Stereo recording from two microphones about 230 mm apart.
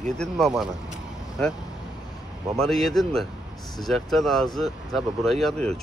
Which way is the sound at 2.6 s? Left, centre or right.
Centre.